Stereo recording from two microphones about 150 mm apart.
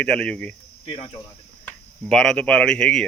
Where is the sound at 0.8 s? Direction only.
40° left (ahead or behind).